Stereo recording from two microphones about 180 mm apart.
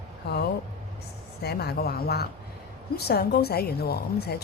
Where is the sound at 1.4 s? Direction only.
60° left (ahead or behind).